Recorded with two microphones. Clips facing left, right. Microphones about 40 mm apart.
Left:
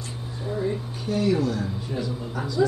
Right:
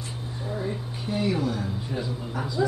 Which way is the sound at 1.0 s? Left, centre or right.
Centre.